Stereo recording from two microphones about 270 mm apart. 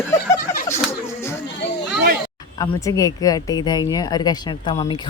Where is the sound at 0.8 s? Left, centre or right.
Centre.